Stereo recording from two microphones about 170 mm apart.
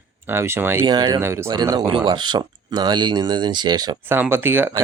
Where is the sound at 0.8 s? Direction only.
25° right (ahead or behind).